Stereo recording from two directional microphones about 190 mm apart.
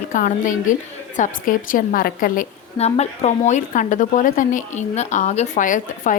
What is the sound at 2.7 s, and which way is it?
A woman's voice, 35° left (ahead or behind).